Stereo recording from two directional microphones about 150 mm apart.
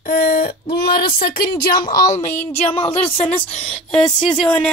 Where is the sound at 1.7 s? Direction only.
25° left (ahead or behind).